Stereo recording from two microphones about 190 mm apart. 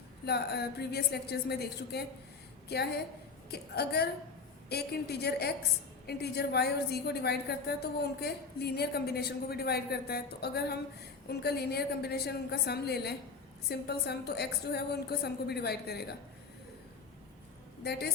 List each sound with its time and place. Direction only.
0.3 s a woman's voice: 60° left (ahead or behind)
17.8 s a woman's voice: 60° left (ahead or behind)